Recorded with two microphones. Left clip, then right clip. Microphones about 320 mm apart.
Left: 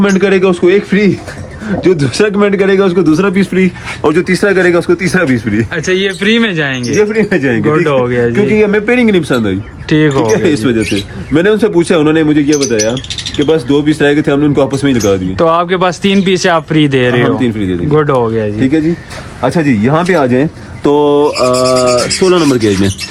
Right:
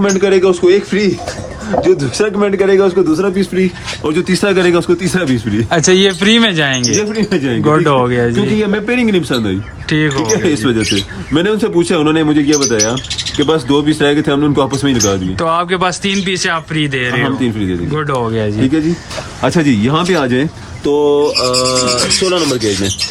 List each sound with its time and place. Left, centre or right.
0.0 s speech: left
3.4 s speech: centre
5.7 s speech: centre
20.9 s mantra: left
21.5 s speech: centre